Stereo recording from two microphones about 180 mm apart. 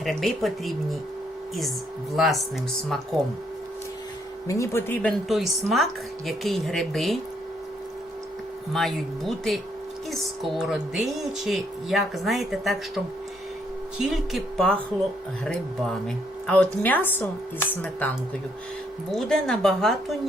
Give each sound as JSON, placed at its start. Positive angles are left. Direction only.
{"t": 0.0, "sound": "speech", "side_deg": 0}
{"t": 2.1, "sound": "speech", "side_deg": 0}
{"t": 4.4, "sound": "speech", "side_deg": 15}
{"t": 5.3, "sound": "speech", "side_deg": 0}
{"t": 8.7, "sound": "speech", "side_deg": 0}
{"t": 10.6, "sound": "speech", "side_deg": 0}
{"t": 14.0, "sound": "speech", "side_deg": 0}
{"t": 16.0, "sound": "speech", "side_deg": 5}